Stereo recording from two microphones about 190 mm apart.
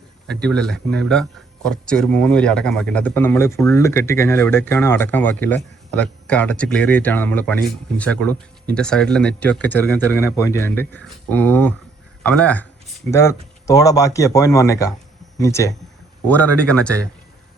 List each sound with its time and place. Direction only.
0.3 s speech: 5° left (ahead or behind)